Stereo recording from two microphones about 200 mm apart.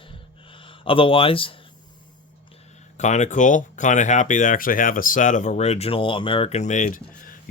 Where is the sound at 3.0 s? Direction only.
35° left (ahead or behind).